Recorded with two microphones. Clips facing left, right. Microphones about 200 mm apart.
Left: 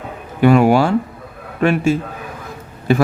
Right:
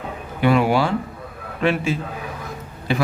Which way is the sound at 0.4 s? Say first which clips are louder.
Left 6 dB; 45° left (ahead or behind).